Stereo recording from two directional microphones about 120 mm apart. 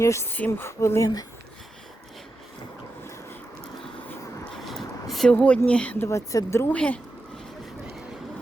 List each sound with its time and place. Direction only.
0.0 s speech: 25° left (ahead or behind)
4.5 s a sound: centre (ahead or behind)
5.3 s speech: 10° left (ahead or behind)
6.1 s speech: 25° left (ahead or behind)
6.7 s speech: 10° left (ahead or behind)